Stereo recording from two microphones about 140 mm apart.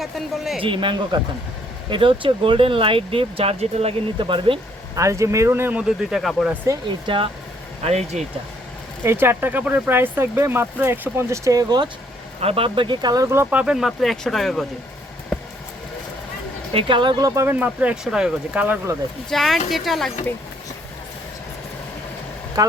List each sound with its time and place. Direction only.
0.0 s speech: centre (ahead or behind)
0.6 s speech: 35° right (ahead or behind)
4.9 s speech: 20° right (ahead or behind)
6.0 s speech: centre (ahead or behind)
6.8 s speech: 35° right (ahead or behind)
7.9 s speech: 50° right (ahead or behind)
9.0 s speech: 15° right (ahead or behind)
12.4 s speech: 45° right (ahead or behind); by 14.7 s centre (ahead or behind)
16.7 s speech: 35° right (ahead or behind); by 18.8 s 10° right (ahead or behind)
19.3 s speech: centre (ahead or behind)
22.6 s speech: 25° right (ahead or behind)